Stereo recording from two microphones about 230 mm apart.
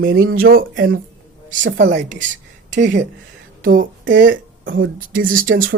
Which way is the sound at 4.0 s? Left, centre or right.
Right.